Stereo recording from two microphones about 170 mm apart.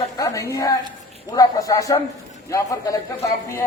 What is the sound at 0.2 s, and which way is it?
A woman's voice, 20° left (ahead or behind).